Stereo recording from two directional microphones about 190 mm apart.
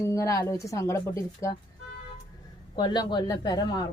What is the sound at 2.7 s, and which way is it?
Speech, 25° left (ahead or behind).